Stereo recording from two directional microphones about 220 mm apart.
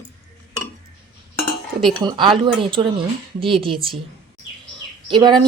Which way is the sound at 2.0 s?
20° right (ahead or behind).